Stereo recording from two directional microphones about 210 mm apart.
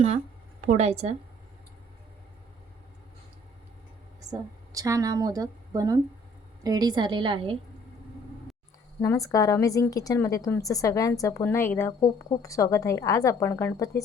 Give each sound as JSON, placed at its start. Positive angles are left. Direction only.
{"t": 0.6, "sound": "a woman's voice", "side_deg": -35}
{"t": 4.3, "sound": "a woman's voice", "side_deg": -15}
{"t": 9.0, "sound": "a woman's voice", "side_deg": 15}